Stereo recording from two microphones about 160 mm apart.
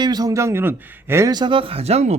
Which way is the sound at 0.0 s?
25° right (ahead or behind).